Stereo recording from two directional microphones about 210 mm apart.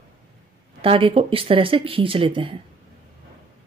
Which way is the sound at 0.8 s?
25° right (ahead or behind).